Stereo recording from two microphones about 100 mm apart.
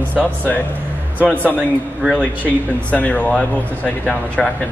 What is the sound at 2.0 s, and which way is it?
Speech, 15° right (ahead or behind).